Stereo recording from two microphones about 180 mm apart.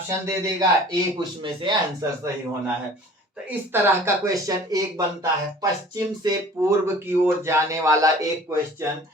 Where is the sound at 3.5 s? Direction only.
15° right (ahead or behind).